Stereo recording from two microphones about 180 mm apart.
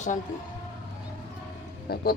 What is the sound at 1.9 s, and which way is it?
Music, 60° left (ahead or behind).